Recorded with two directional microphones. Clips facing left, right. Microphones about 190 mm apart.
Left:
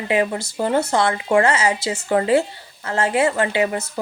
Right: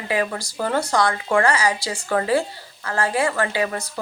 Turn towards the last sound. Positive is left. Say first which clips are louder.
# left 3 dB
turn(degrees=25)  # may be behind; listen again after turning